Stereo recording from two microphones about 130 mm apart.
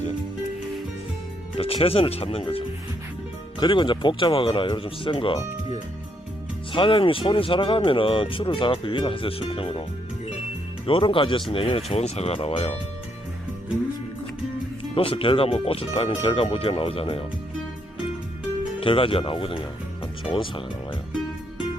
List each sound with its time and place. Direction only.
1.5 s speech: 50° left (ahead or behind)
6.7 s speech: 40° left (ahead or behind)
10.8 s speech: 45° left (ahead or behind)
14.9 s speech: 45° left (ahead or behind)
18.8 s speech: 45° left (ahead or behind)